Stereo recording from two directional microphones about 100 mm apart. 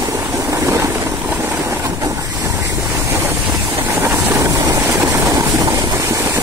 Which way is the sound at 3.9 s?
25° right (ahead or behind).